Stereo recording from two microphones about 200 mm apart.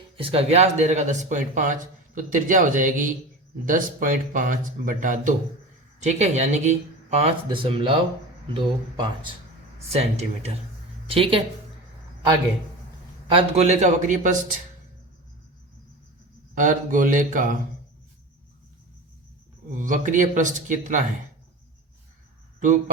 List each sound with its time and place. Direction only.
0.2 s speech: 30° right (ahead or behind)
13.2 s speech: 30° right (ahead or behind)
16.6 s speech: 40° right (ahead or behind)
19.7 s speech: 40° right (ahead or behind)